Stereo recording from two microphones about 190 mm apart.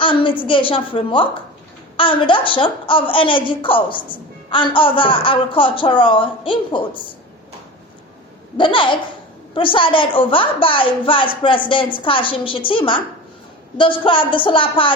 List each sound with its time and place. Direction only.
0.0 s a sound: 25° left (ahead or behind)
0.4 s a woman's voice: 25° left (ahead or behind)
8.5 s a woman's voice: 25° left (ahead or behind)